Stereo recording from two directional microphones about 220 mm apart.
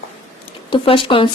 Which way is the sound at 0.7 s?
25° left (ahead or behind).